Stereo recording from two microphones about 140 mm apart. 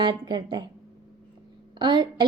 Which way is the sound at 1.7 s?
35° right (ahead or behind).